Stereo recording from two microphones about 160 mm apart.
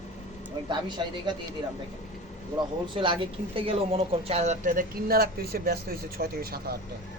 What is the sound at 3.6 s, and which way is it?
Speech, 35° right (ahead or behind).